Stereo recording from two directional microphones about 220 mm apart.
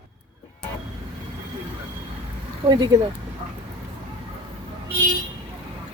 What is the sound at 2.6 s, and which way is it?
Speech, 20° right (ahead or behind).